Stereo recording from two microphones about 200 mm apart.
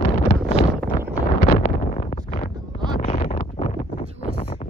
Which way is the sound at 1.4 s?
45° left (ahead or behind).